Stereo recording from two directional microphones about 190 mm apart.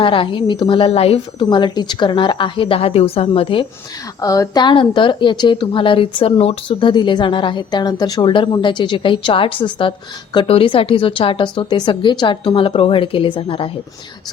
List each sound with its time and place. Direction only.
0.0 s a woman's voice: 25° left (ahead or behind)